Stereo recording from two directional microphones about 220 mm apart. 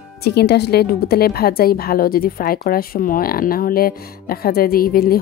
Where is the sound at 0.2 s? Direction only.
50° left (ahead or behind).